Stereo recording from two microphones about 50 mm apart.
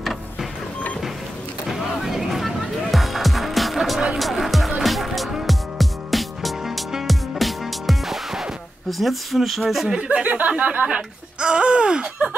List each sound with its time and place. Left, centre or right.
0.0 s vehicle: centre
1.7 s music: centre
8.9 s speech: centre
9.8 s speech: right